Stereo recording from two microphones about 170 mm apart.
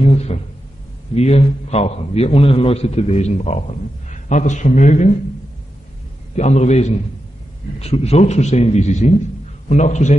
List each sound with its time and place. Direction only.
0.0 s a sound: 40° left (ahead or behind)
1.1 s a man's voice: 40° left (ahead or behind)
6.3 s a man's voice: 40° left (ahead or behind)